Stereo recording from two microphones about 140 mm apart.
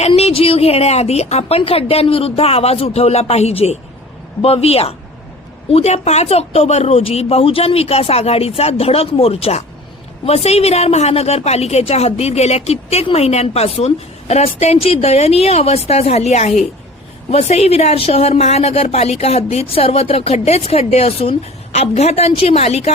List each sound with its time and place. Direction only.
0.1 s a woman's voice: 45° left (ahead or behind)